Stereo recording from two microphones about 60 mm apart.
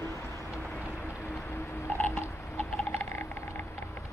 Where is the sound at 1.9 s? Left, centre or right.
Left.